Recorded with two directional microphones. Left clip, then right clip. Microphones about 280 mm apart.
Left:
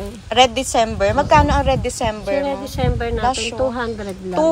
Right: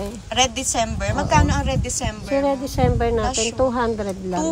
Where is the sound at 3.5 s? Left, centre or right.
Right.